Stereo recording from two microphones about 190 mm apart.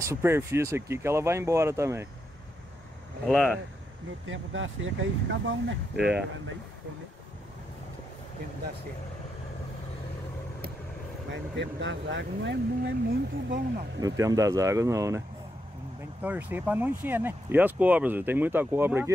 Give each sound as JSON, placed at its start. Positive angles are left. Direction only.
{"t": 0.1, "sound": "speech", "side_deg": -15}
{"t": 3.3, "sound": "speech", "side_deg": 0}
{"t": 4.3, "sound": "speech", "side_deg": -90}
{"t": 5.9, "sound": "speech", "side_deg": -5}
{"t": 11.5, "sound": "speech", "side_deg": -70}
{"t": 13.9, "sound": "speech", "side_deg": -15}